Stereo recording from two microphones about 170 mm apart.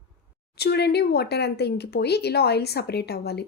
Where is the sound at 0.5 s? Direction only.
75° left (ahead or behind).